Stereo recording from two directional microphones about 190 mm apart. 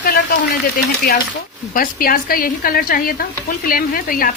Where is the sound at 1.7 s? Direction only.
50° left (ahead or behind).